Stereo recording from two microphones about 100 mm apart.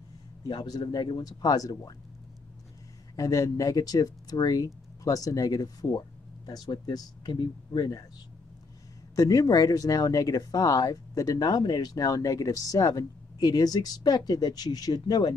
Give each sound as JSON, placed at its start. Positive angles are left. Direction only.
{"t": 0.5, "sound": "speech", "side_deg": 45}
{"t": 3.2, "sound": "speech", "side_deg": 35}
{"t": 9.1, "sound": "speech", "side_deg": 35}